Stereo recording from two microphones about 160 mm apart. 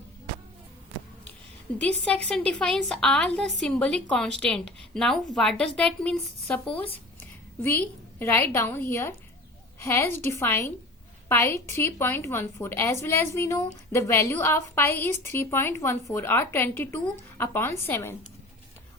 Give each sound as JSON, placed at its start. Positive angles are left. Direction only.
{"t": 1.8, "sound": "a woman's voice", "side_deg": 10}